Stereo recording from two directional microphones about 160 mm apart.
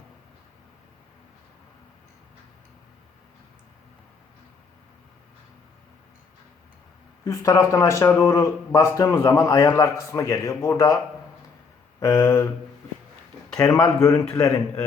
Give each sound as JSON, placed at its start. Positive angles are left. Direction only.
{"t": 7.3, "sound": "a man's voice", "side_deg": 20}
{"t": 13.6, "sound": "a man's voice", "side_deg": 20}